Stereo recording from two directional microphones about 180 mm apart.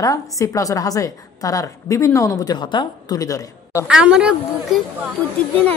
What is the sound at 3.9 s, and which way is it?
Speech, 5° right (ahead or behind).